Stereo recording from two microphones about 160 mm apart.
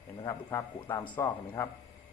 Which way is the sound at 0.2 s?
15° left (ahead or behind).